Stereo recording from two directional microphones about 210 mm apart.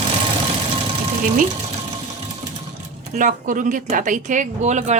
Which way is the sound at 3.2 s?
40° right (ahead or behind).